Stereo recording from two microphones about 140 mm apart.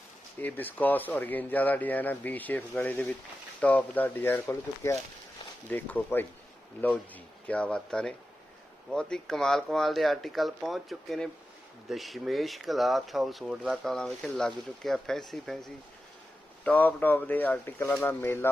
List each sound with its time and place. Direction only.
0.4 s speech: 15° left (ahead or behind)
7.4 s speech: 10° left (ahead or behind)
16.6 s speech: 10° left (ahead or behind)